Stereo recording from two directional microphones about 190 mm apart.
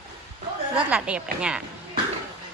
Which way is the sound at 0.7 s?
5° right (ahead or behind).